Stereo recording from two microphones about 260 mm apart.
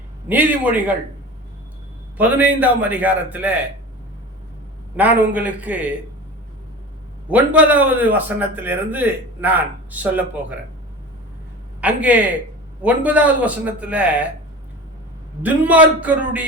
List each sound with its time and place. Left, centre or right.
0.3 s a man's voice: centre
2.1 s a man's voice: centre
4.9 s a man's voice: centre
7.3 s a man's voice: centre
11.8 s a man's voice: centre
15.4 s a man's voice: centre